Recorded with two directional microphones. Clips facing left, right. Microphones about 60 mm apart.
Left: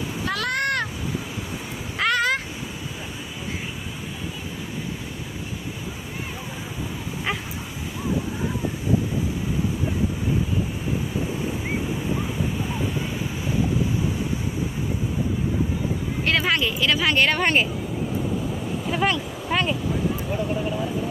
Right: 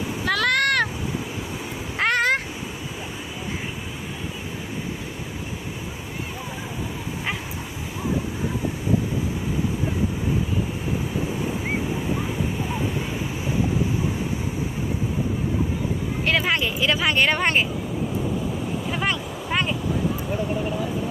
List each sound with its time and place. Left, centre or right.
0.3 s vehicle: right
2.0 s cat: right
16.2 s a sound: centre
16.5 s a sound: centre
17.0 s a woman's voice: centre
19.0 s vehicle: centre
19.5 s boat: centre